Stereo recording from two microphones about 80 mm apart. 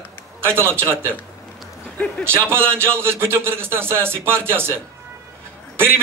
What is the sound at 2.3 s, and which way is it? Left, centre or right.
A man's voice, right.